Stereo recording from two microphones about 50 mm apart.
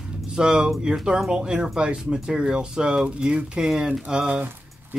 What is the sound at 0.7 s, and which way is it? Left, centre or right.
Speech, centre.